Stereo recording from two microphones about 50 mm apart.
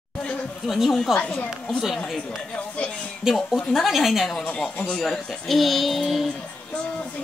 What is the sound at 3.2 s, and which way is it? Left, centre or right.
A woman's voice, centre.